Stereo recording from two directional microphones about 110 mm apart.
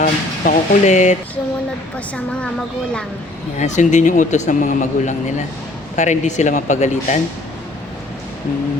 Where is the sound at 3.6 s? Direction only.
90° left.